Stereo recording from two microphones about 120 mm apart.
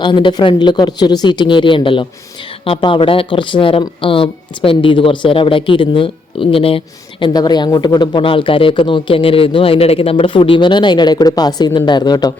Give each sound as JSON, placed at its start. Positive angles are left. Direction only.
{"t": 0.0, "sound": "speech", "side_deg": 40}
{"t": 7.3, "sound": "speech", "side_deg": 35}